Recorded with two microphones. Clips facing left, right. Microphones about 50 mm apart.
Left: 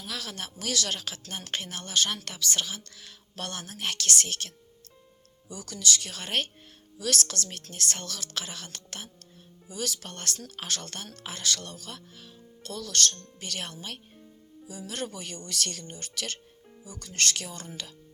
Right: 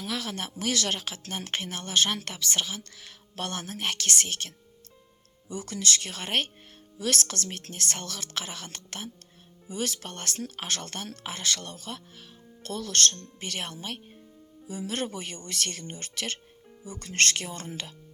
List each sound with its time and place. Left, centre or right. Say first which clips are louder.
0.2 s speech: right 4 dB; right
5.5 s speech: right 1 dB; right
6.1 s speech: right 2 dB; right
9.6 s speech: right 2 dB; right
10.1 s speech: right 2 dB; right
12.6 s speech: right 2 dB; right
13.1 s speech: right 2 dB; right
16.8 s speech: right 4 dB; right